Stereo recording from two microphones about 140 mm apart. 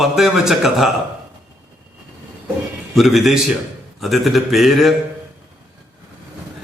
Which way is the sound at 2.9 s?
Centre (ahead or behind).